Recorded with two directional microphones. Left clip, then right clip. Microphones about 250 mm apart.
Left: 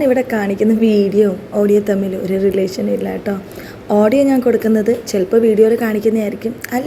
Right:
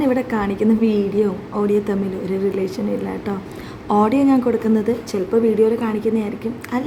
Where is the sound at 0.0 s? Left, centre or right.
Centre.